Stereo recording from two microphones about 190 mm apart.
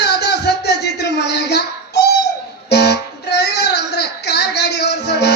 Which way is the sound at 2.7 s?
60° left (ahead or behind).